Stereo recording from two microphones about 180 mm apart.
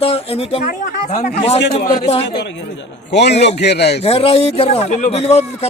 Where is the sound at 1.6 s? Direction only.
75° left (ahead or behind).